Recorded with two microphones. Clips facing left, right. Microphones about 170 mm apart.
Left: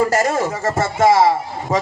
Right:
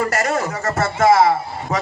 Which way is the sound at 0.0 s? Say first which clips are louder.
Left 3 dB; 25° left (ahead or behind).